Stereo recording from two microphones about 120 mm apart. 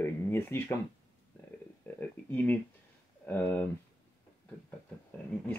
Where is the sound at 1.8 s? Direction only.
15° left (ahead or behind).